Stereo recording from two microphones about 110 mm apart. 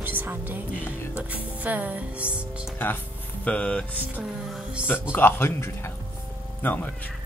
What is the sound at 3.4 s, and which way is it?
Speech, 10° left (ahead or behind).